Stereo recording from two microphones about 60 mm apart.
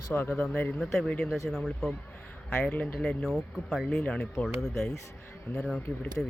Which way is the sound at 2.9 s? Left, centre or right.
Centre.